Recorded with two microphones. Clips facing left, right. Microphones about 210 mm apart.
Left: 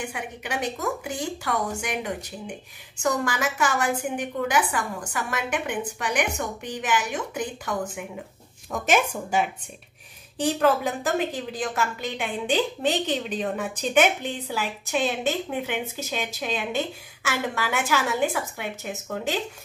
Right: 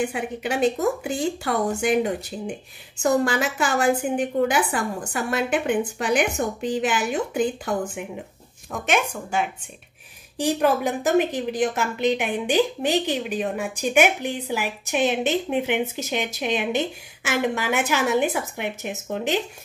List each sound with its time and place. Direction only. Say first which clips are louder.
0.1 s a woman's voice: right 6 dB; 30° right (ahead or behind)
8.7 s speech: left 1 dB; centre (ahead or behind)
10.3 s a woman's voice: right 1 dB; 15° right (ahead or behind)